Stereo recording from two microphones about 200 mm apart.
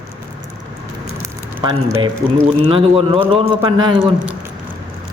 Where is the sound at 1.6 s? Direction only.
25° right (ahead or behind).